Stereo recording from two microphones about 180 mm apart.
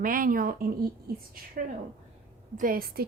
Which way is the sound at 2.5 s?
50° right (ahead or behind).